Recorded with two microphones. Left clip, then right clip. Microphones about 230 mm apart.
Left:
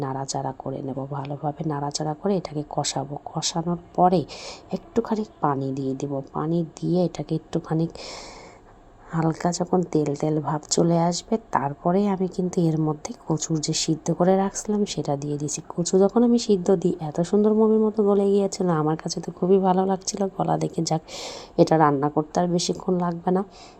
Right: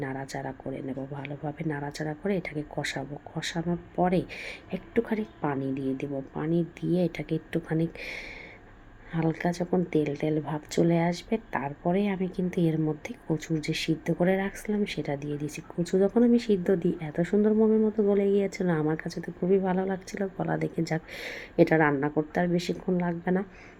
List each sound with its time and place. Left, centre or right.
0.0 s speech: centre